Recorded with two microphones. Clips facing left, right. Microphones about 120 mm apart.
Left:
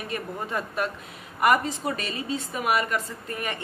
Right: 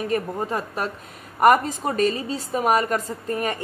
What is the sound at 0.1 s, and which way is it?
A woman's voice, 35° right (ahead or behind).